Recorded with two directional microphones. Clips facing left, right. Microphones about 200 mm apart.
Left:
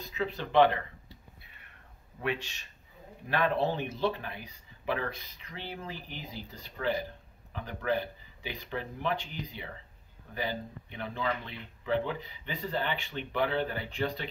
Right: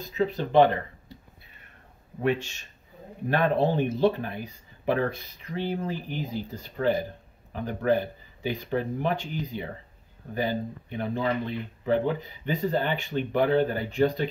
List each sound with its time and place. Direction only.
0.0 s speech: 40° right (ahead or behind)
2.2 s speech: 45° right (ahead or behind)